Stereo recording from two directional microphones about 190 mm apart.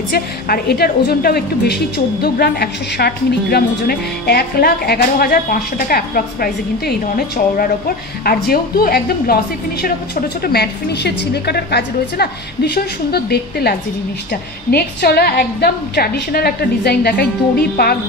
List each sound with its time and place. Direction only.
0.5 s a woman's voice: 55° left (ahead or behind)